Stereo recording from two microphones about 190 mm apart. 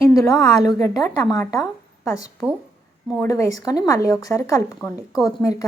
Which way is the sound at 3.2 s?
15° left (ahead or behind).